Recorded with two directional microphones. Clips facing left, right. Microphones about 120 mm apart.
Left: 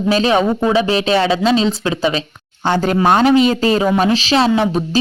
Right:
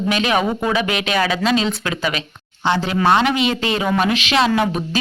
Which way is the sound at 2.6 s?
45° left (ahead or behind).